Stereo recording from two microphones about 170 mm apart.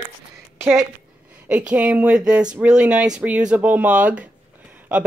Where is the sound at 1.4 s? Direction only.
10° right (ahead or behind).